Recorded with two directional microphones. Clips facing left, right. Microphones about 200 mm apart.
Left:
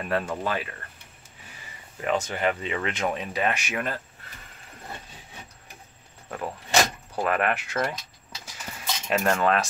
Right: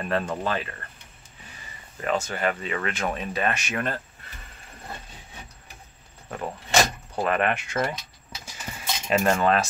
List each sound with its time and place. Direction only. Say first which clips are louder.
0.0 s speech: right 1 dB; 10° left (ahead or behind)
2.0 s speech: even; 15° left (ahead or behind)
6.2 s speech: even; centre (ahead or behind)
8.5 s a sound: right 1 dB; 5° right (ahead or behind)